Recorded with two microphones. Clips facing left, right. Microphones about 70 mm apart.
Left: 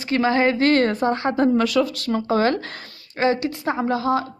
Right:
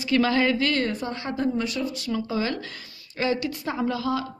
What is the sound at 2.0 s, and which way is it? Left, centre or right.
Speech, left.